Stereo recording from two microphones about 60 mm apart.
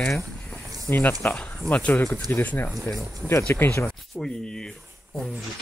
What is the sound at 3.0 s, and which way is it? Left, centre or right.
Speech, left.